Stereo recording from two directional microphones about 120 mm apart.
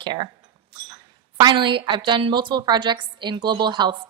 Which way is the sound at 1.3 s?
40° right (ahead or behind).